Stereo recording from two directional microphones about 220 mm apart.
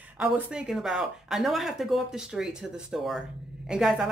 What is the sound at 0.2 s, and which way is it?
Speech, 5° right (ahead or behind).